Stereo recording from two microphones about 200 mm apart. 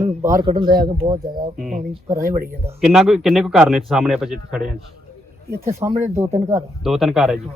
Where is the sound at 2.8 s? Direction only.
5° right (ahead or behind).